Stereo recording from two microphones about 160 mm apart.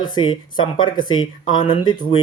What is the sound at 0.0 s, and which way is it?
Speech, 30° left (ahead or behind).